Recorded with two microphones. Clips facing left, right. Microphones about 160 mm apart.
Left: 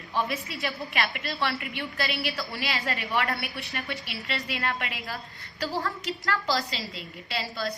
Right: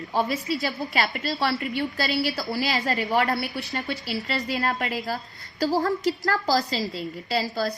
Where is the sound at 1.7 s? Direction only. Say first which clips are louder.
Right 6 dB; 30° right (ahead or behind).